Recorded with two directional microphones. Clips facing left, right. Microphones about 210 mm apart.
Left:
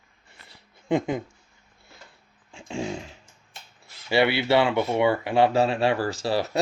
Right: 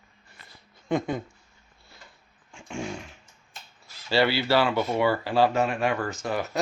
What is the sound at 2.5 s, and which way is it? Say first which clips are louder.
Dog: left 3 dB; 20° left (ahead or behind).